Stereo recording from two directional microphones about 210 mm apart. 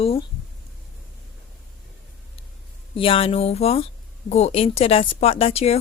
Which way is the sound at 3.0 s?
25° left (ahead or behind).